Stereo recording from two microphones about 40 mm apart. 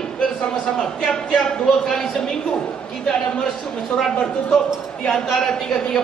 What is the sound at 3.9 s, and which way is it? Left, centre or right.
A man's voice, centre.